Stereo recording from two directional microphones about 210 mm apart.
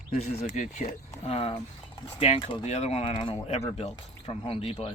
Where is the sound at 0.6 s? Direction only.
35° left (ahead or behind).